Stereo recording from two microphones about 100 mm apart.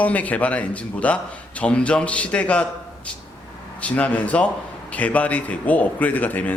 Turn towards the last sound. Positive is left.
turn(degrees=15)  # may be behind; listen again after turning